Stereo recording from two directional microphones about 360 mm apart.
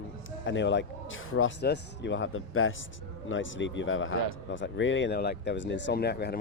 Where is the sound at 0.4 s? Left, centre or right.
Left.